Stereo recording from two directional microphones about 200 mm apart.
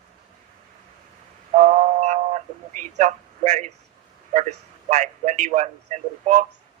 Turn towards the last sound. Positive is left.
turn(degrees=-35)  # may be behind; listen again after turning